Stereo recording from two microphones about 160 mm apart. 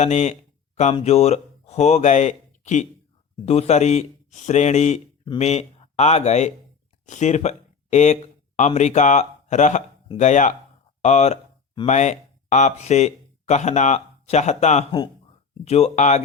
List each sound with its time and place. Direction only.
0.0 s a man's voice: 45° left (ahead or behind)